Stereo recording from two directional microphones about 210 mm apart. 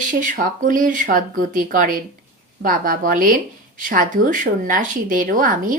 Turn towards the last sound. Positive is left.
turn(degrees=-40)  # may be behind; listen again after turning